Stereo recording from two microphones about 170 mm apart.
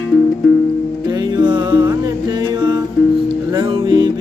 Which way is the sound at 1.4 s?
25° right (ahead or behind).